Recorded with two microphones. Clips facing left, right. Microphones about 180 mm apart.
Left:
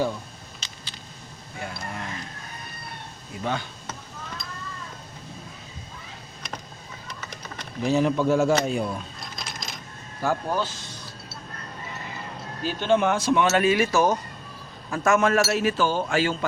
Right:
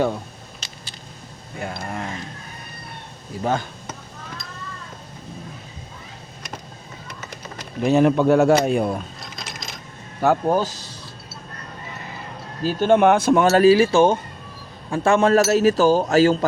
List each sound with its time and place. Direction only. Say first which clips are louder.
1.6 s a sound: right 5 dB; 50° right (ahead or behind)
3.4 s speech: right 6 dB; 45° right (ahead or behind)
7.9 s speech: right 6 dB; 60° right (ahead or behind)
10.2 s speech: right 7 dB; 55° right (ahead or behind)
12.6 s a man's voice: right 6 dB; 50° right (ahead or behind)